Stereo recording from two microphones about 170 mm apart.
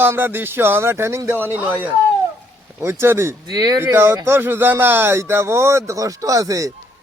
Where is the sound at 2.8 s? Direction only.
15° right (ahead or behind).